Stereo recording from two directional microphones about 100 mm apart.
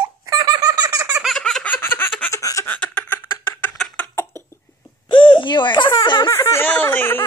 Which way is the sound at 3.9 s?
25° left (ahead or behind).